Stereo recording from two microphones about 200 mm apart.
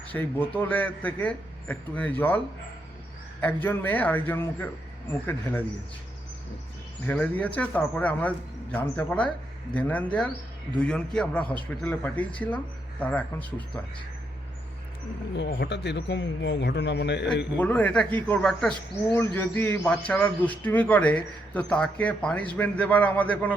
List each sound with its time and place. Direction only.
0.1 s a man's voice: 10° left (ahead or behind)
3.4 s a man's voice: 10° left (ahead or behind)
7.1 s a man's voice: 5° left (ahead or behind)
15.4 s speech: 60° left (ahead or behind)
17.6 s a man's voice: 10° left (ahead or behind)